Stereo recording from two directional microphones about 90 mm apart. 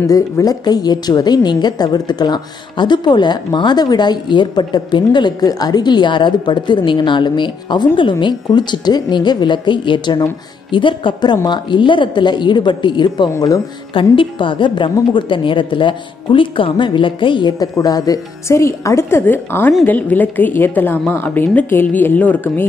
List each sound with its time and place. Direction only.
0.0 s a woman's voice: 40° left (ahead or behind); by 13.3 s 55° left (ahead or behind)
13.9 s a woman's voice: 70° left (ahead or behind)
17.7 s a woman's voice: 45° left (ahead or behind)
18.5 s speech: 30° left (ahead or behind)